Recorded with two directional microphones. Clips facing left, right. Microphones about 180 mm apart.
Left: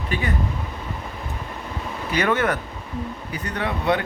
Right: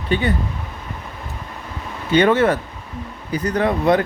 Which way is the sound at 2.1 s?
30° right (ahead or behind).